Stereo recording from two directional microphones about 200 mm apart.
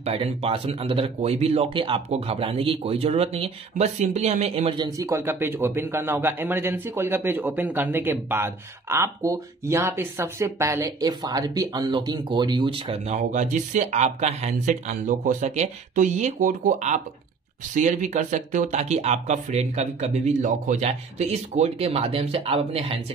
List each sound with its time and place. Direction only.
0.0 s speech: 30° right (ahead or behind)